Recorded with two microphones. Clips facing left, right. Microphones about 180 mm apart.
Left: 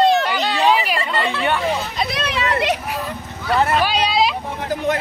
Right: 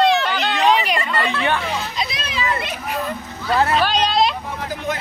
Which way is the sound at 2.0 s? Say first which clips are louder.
Left 3 dB; 60° left (ahead or behind).